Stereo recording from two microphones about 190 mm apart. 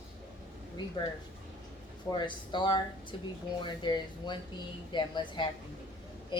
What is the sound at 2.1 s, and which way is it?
A woman's voice, 25° left (ahead or behind).